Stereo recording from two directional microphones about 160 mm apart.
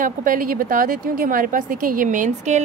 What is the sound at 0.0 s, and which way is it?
A woman's voice, 60° right (ahead or behind).